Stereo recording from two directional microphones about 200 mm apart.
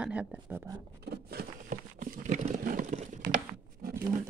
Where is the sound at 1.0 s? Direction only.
55° right (ahead or behind).